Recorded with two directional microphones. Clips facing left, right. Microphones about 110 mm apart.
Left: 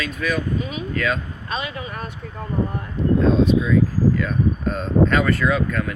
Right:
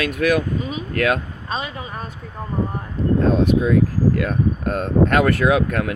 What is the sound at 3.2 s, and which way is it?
Speech, 60° right (ahead or behind).